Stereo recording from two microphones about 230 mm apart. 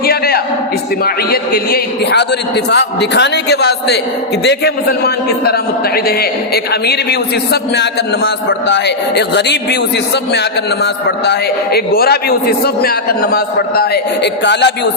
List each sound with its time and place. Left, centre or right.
0.0 s a sound: left
1.0 s a man's voice: left
11.3 s a man's voice: left